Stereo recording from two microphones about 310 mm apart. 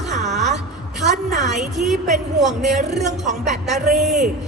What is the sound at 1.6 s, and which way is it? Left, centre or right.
A woman's voice, centre.